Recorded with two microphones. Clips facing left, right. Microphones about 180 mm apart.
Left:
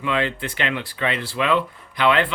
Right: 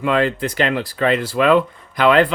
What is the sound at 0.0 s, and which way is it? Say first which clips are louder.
Speech: right 6 dB; 40° right (ahead or behind).